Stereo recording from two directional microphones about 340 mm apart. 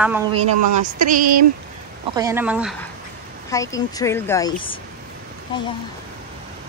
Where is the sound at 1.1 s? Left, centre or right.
Right.